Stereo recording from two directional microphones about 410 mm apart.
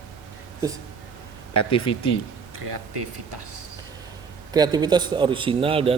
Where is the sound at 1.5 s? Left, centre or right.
Left.